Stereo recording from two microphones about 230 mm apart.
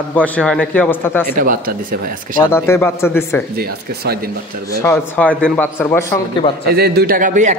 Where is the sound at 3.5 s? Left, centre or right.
Right.